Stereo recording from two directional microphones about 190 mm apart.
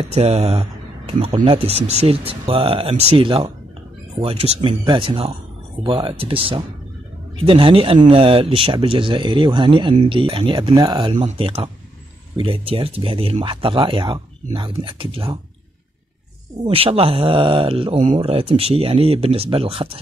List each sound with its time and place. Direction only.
0.1 s speech: 35° right (ahead or behind)
16.6 s speech: 30° right (ahead or behind)